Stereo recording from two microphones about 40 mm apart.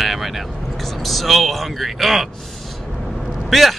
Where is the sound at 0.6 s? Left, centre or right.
Centre.